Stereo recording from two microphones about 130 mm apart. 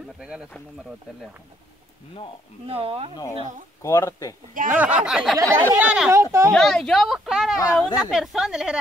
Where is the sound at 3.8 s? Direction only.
20° left (ahead or behind).